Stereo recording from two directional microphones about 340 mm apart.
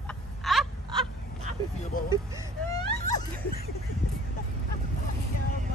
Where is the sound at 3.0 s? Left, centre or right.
Left.